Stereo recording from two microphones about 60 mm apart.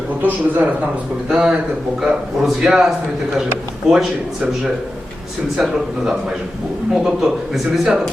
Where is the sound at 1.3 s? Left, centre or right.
Centre.